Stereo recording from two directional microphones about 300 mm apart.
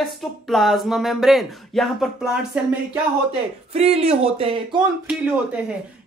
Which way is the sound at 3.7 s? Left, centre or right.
Right.